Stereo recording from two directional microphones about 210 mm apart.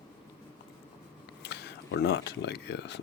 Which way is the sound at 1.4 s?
50° left (ahead or behind).